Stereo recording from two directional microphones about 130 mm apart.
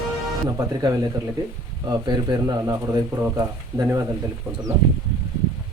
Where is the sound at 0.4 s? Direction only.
30° right (ahead or behind).